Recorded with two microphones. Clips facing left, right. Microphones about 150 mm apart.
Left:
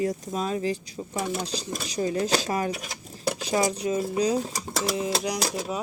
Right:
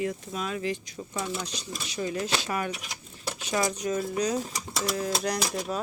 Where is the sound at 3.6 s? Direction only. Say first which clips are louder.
Left 1 dB; 30° left (ahead or behind).